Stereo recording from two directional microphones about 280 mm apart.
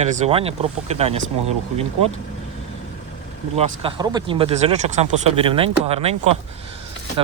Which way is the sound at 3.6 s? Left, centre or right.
Centre.